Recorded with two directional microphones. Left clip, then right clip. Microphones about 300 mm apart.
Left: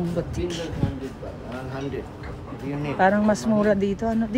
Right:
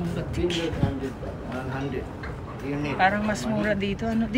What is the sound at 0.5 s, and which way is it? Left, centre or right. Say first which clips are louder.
Speech: right 3 dB; centre.